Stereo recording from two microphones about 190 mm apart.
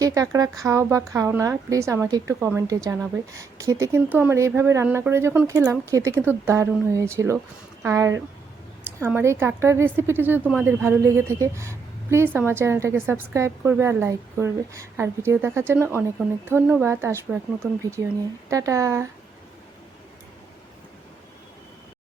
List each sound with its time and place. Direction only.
0.0 s a woman's voice: 20° right (ahead or behind)